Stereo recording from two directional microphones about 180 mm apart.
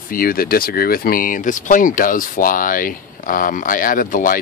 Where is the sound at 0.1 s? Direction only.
50° left (ahead or behind).